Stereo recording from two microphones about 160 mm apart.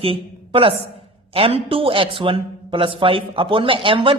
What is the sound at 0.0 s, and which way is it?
A woman's voice, 35° right (ahead or behind).